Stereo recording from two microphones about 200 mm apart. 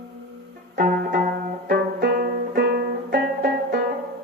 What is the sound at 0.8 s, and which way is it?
Music, 45° right (ahead or behind).